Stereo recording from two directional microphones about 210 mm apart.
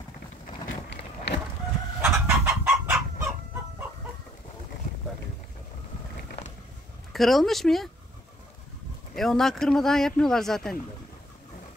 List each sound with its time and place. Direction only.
0.8 s run: 55° left (ahead or behind)
2.0 s chicken: 10° right (ahead or behind)
7.1 s speech: centre (ahead or behind)
9.1 s speech: centre (ahead or behind)